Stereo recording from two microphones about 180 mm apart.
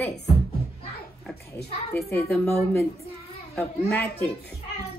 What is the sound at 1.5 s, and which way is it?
Speech, 15° left (ahead or behind).